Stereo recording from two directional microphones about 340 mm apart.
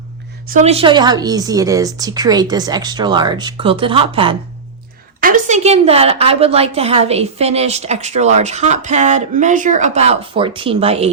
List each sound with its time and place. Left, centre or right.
0.5 s a woman's voice: centre